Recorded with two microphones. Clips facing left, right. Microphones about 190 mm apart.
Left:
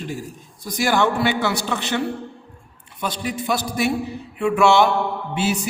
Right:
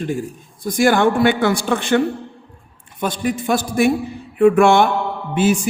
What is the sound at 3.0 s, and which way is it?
Speech, 50° right (ahead or behind).